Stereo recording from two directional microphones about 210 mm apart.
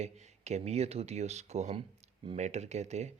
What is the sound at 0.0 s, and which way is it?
Speech, 35° right (ahead or behind).